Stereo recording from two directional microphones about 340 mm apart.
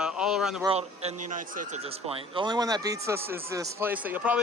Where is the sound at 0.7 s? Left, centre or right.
Centre.